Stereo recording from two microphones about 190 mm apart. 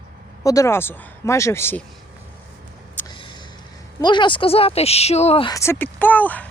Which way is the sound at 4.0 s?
25° left (ahead or behind).